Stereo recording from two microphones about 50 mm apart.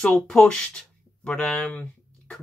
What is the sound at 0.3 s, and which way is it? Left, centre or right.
Speech, centre.